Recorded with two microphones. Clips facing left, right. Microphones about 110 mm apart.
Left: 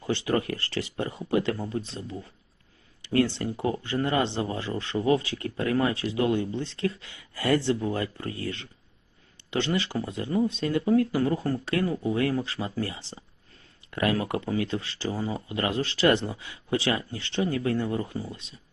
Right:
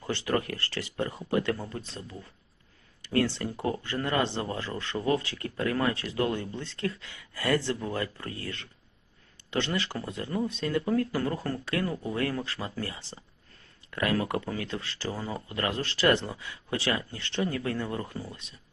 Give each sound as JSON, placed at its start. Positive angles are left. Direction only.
{"t": 0.5, "sound": "speech", "side_deg": 30}